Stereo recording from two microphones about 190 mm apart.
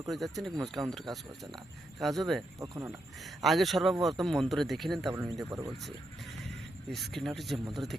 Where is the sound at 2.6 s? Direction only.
15° right (ahead or behind).